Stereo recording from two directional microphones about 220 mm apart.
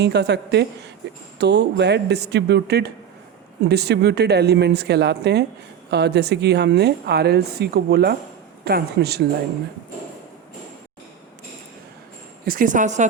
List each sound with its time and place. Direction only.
0.0 s a woman's voice: 50° right (ahead or behind)
12.5 s a woman's voice: 40° right (ahead or behind)